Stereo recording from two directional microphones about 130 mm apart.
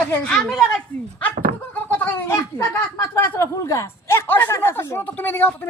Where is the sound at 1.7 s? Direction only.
15° left (ahead or behind).